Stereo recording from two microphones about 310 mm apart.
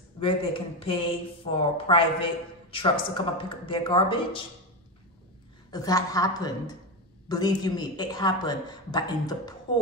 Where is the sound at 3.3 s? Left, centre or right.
Centre.